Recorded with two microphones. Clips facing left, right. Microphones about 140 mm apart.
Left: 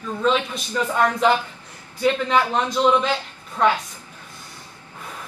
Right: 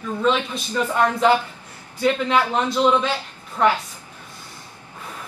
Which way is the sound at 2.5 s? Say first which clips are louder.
Even; 10° right (ahead or behind).